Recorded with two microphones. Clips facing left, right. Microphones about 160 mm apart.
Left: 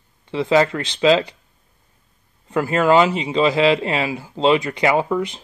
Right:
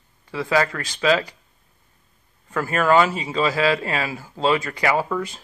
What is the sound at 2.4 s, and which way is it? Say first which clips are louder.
Speech: left 3 dB; 20° left (ahead or behind).